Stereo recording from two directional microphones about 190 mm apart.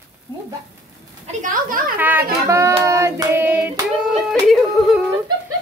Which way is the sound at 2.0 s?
10° right (ahead or behind).